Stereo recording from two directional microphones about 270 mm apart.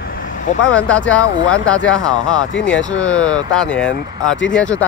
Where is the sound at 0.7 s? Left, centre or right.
Centre.